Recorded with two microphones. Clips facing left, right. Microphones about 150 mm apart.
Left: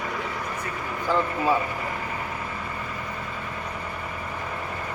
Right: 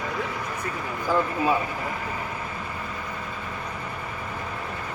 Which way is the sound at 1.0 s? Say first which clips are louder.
Even; 10° right (ahead or behind).